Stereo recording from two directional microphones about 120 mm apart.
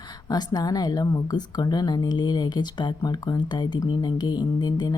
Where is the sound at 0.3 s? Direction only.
35° left (ahead or behind).